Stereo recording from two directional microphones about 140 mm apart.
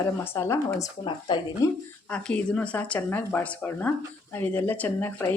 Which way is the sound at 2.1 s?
10° left (ahead or behind).